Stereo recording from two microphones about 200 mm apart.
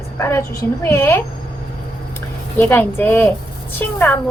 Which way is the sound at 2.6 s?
10° left (ahead or behind).